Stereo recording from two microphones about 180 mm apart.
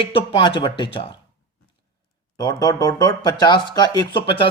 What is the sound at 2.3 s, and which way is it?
Speech, 20° left (ahead or behind).